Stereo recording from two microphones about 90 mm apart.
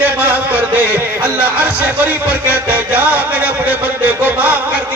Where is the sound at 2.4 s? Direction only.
20° right (ahead or behind).